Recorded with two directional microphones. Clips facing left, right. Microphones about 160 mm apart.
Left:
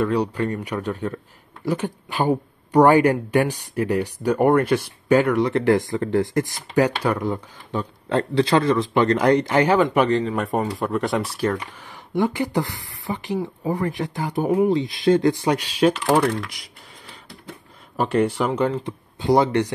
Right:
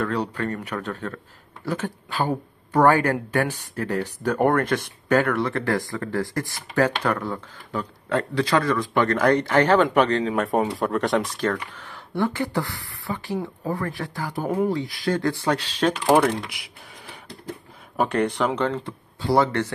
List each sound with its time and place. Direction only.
0.0 s speech: 10° left (ahead or behind)
17.9 s speech: centre (ahead or behind)